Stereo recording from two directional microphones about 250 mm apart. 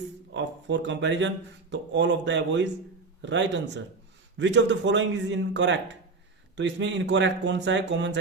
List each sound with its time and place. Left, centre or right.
0.3 s a man's voice: right